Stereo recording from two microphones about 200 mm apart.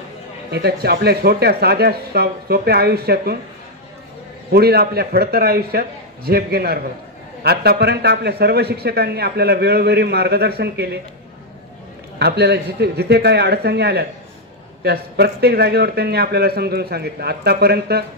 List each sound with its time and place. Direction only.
0.5 s a man's voice: 55° right (ahead or behind)
4.5 s a man's voice: 50° right (ahead or behind)
12.2 s a man's voice: 55° right (ahead or behind)